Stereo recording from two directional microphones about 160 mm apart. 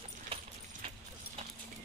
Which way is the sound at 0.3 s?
35° right (ahead or behind).